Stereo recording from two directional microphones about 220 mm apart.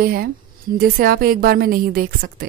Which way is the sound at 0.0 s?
40° right (ahead or behind).